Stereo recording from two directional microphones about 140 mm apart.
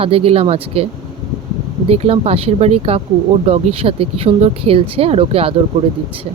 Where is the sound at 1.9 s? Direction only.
45° right (ahead or behind).